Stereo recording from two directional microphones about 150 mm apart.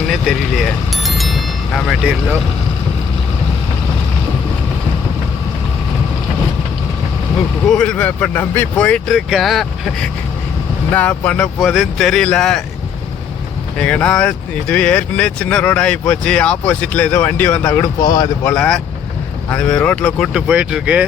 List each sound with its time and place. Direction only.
0.1 s vehicle: centre (ahead or behind)
7.7 s speech: 5° left (ahead or behind)
11.6 s speech: centre (ahead or behind)
13.7 s speech: 5° left (ahead or behind)
18.0 s speech: 25° left (ahead or behind)
18.4 s speech: 5° left (ahead or behind)
20.5 s speech: 5° right (ahead or behind)